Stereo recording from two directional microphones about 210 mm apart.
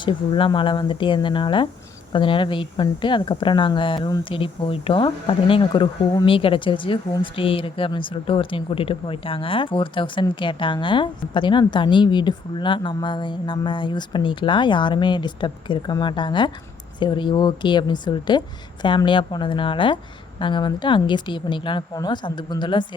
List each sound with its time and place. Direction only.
0.0 s speech: 25° left (ahead or behind)